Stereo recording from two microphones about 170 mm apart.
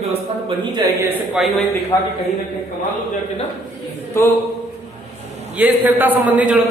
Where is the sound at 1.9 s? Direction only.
25° left (ahead or behind).